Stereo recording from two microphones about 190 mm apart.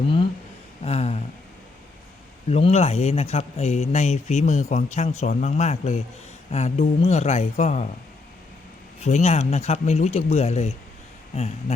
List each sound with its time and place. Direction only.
0.9 s a sound: 35° left (ahead or behind)
2.5 s speech: 35° left (ahead or behind)
9.0 s speech: 35° left (ahead or behind)